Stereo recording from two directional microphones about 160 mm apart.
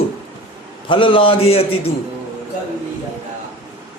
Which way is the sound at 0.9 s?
30° left (ahead or behind).